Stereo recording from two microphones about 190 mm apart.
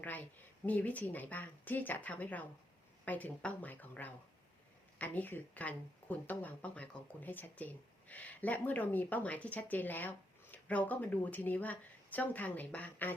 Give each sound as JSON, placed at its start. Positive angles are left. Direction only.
{"t": 0.6, "sound": "speech", "side_deg": 10}